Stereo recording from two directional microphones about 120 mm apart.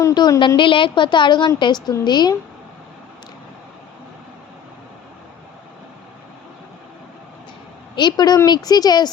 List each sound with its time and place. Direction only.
0.0 s a woman's voice: 35° left (ahead or behind)
7.9 s a woman's voice: 35° left (ahead or behind)